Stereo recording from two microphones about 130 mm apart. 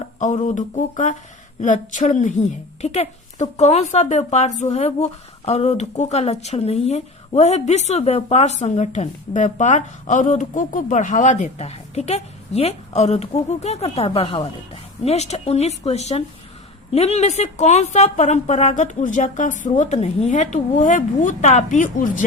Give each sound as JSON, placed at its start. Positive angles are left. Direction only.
{"t": 0.4, "sound": "a woman's voice", "side_deg": 80}